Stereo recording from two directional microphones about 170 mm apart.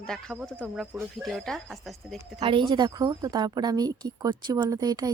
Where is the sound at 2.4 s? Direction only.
30° right (ahead or behind).